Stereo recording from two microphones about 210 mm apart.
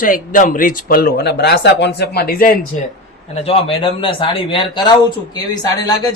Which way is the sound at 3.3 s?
30° left (ahead or behind).